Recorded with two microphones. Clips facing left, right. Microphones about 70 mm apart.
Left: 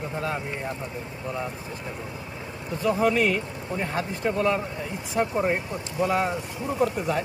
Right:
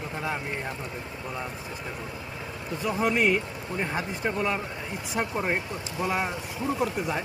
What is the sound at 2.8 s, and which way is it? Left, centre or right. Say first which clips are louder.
Speech: left 3 dB; centre.